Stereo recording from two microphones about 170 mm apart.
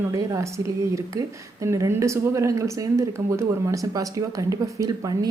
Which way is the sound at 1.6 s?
15° right (ahead or behind).